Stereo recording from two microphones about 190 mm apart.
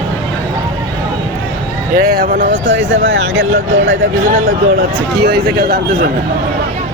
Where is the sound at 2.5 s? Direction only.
80° right.